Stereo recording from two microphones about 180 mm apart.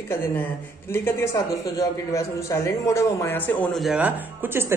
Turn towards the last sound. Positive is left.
turn(degrees=-10)  # may be behind; listen again after turning